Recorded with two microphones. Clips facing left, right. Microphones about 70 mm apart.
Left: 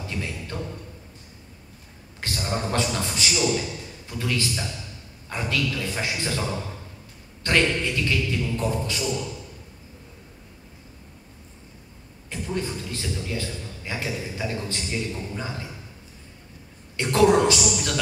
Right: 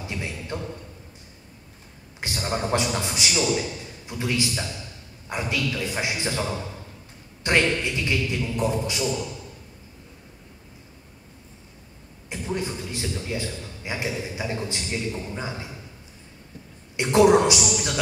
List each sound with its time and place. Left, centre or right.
0.0 s a sound: centre
2.1 s a sound: centre
4.1 s a man's voice: centre
7.4 s a man's voice: centre
12.3 s a man's voice: centre
16.9 s a man's voice: centre